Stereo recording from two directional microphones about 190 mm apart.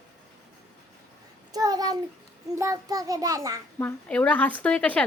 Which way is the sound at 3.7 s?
10° left (ahead or behind).